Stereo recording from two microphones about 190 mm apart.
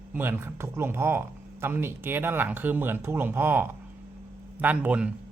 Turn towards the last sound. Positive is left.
turn(degrees=-5)  # may be behind; listen again after turning